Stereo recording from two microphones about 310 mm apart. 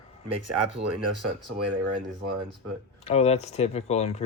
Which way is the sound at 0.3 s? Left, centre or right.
Right.